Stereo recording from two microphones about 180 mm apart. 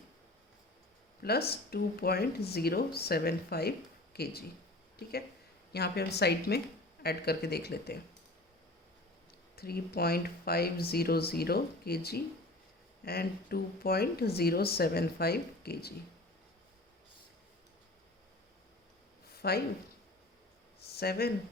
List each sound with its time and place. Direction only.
1.2 s speech: 60° left (ahead or behind)
5.7 s speech: 60° left (ahead or behind)
9.6 s speech: 60° left (ahead or behind)
19.3 s a sound: 60° left (ahead or behind)
20.9 s speech: 60° left (ahead or behind)